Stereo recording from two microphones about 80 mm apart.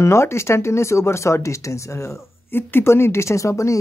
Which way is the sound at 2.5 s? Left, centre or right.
Left.